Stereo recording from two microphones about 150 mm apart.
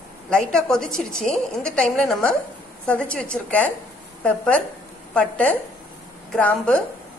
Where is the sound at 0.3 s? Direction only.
5° left (ahead or behind).